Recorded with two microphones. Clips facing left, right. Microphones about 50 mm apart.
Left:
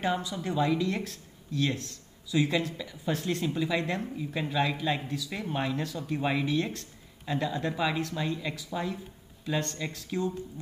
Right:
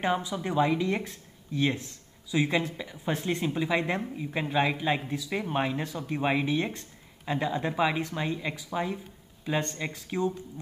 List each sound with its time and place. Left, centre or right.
0.0 s speech: right